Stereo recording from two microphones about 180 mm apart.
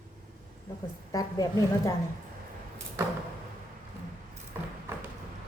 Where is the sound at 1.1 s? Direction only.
20° left (ahead or behind).